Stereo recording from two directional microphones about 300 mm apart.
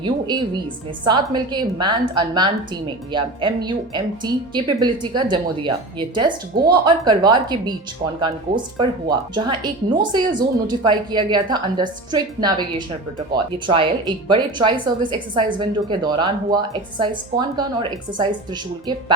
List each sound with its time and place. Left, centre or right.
0.0 s a woman's voice: centre
13.7 s a woman's voice: centre